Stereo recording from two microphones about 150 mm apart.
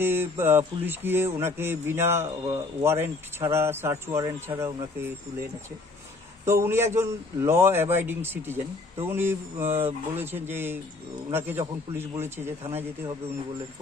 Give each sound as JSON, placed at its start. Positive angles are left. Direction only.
{"t": 0.0, "sound": "speech", "side_deg": -15}
{"t": 6.4, "sound": "speech", "side_deg": -15}